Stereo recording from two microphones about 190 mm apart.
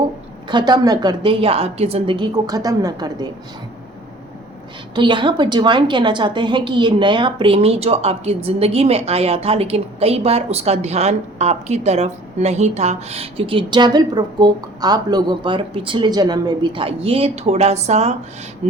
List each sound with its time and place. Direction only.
0.4 s a woman's voice: 25° right (ahead or behind)
4.9 s a woman's voice: 25° right (ahead or behind)
18.6 s rub: 35° right (ahead or behind)